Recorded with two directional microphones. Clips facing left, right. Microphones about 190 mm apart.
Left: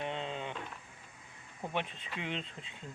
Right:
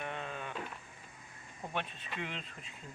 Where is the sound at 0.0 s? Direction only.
20° left (ahead or behind).